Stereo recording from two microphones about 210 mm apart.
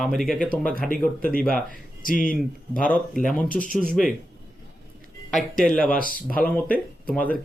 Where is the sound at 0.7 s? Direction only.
40° left (ahead or behind).